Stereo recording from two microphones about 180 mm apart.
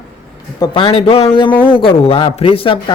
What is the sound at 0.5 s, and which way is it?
Speech, 25° left (ahead or behind).